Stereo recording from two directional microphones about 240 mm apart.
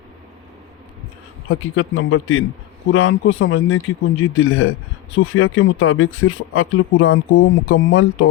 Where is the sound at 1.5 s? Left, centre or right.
Left.